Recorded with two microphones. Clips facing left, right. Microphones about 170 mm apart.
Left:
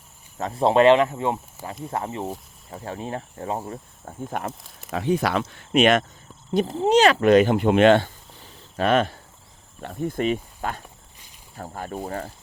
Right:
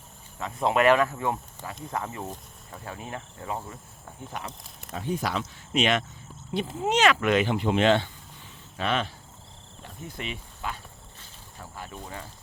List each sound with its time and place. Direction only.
0.3 s speech: 35° left (ahead or behind); by 4.5 s 50° left (ahead or behind)
4.9 s speech: 85° left; by 12.3 s 50° left (ahead or behind)